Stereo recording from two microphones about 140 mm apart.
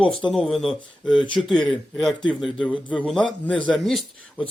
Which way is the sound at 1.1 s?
35° left (ahead or behind).